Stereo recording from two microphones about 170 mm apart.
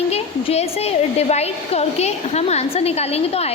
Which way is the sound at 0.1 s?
35° left (ahead or behind).